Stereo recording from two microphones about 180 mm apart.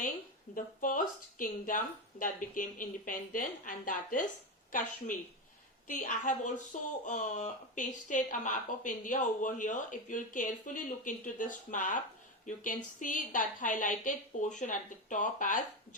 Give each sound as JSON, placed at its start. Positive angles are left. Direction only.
{"t": 0.5, "sound": "speech", "side_deg": 50}